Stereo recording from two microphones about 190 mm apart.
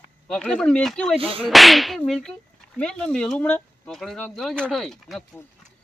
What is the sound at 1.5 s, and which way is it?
Speech, centre (ahead or behind).